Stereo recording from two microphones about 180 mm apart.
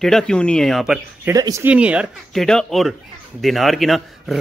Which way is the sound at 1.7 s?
5° right (ahead or behind).